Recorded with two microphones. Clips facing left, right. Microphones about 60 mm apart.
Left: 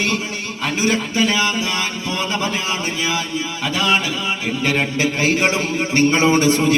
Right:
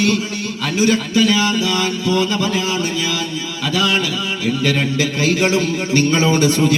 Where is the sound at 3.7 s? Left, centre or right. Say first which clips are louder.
Right 1 dB; left.